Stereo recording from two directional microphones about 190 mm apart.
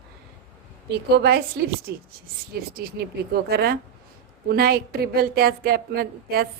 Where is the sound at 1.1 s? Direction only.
55° right (ahead or behind).